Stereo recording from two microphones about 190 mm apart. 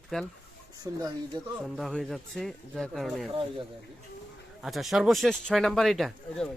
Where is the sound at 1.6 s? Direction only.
Centre (ahead or behind).